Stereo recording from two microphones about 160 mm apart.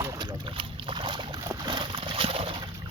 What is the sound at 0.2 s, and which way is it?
Boat, 25° right (ahead or behind).